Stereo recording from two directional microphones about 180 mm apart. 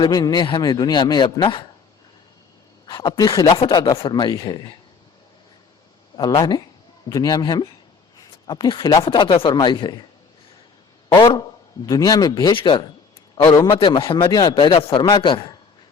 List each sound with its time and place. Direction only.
0.0 s speech: 25° left (ahead or behind)
2.8 s speech: 20° left (ahead or behind)
6.1 s speech: 20° left (ahead or behind)
11.1 s speech: 25° left (ahead or behind)